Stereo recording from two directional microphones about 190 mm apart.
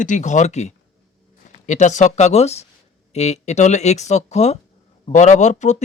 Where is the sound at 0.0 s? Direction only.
40° left (ahead or behind).